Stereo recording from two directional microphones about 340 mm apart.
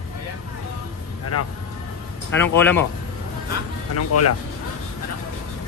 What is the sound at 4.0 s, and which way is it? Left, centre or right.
Speech, left.